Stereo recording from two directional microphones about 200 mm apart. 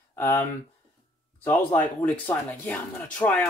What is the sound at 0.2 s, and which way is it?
Speech, 10° left (ahead or behind).